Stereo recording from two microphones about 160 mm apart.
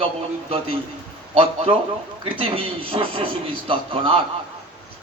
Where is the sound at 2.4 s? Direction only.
35° right (ahead or behind).